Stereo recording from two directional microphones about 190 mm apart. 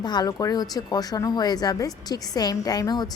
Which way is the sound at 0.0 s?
20° left (ahead or behind).